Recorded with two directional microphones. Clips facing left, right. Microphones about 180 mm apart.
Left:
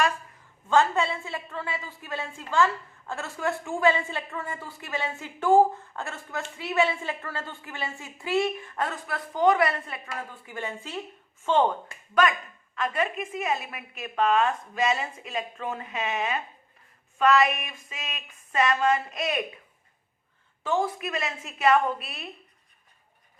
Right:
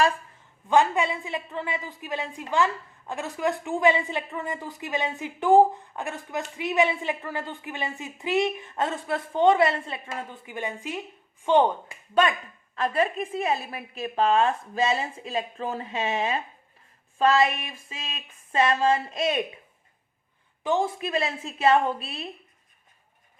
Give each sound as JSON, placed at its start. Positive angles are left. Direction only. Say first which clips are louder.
{"t": 0.7, "sound": "a woman's voice", "louder": "right 1 dB", "side_deg": -15}
{"t": 12.7, "sound": "a woman's voice", "louder": "right 3 dB", "side_deg": -35}
{"t": 20.7, "sound": "a woman's voice", "louder": "right 2 dB", "side_deg": -25}